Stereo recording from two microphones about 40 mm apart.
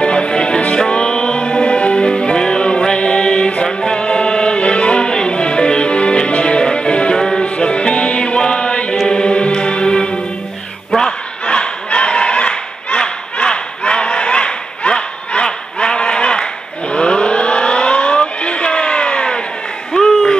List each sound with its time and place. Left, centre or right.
0.0 s music: left
7.2 s music: centre
7.4 s music: left
11.0 s battle cry: left
16.9 s a sound: left